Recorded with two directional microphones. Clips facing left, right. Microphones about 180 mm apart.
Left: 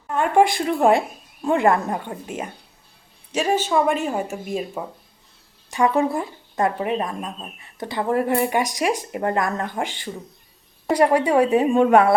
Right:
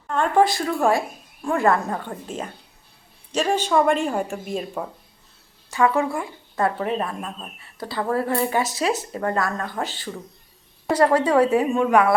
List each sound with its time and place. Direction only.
0.1 s speech: 10° left (ahead or behind)
5.7 s speech: 15° left (ahead or behind)
11.7 s speech: 30° left (ahead or behind)